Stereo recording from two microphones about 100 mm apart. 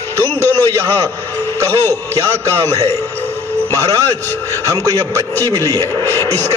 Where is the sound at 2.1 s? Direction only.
30° right (ahead or behind).